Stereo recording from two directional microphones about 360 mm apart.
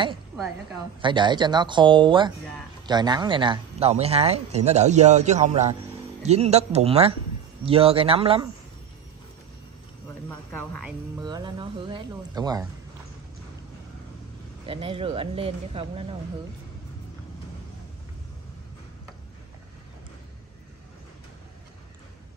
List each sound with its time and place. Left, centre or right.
1.0 s speech: centre
10.0 s speech: centre
14.7 s speech: centre